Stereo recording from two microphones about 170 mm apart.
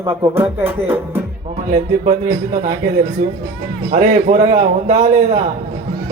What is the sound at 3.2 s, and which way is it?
Speech, 90° right.